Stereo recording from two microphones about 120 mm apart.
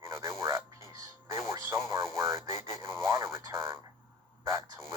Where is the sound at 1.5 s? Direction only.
25° right (ahead or behind).